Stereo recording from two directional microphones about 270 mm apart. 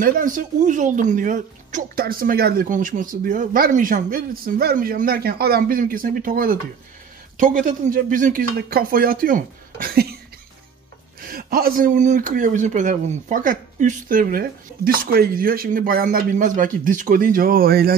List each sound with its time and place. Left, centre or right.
0.0 s a man's voice: right
11.1 s a man's voice: right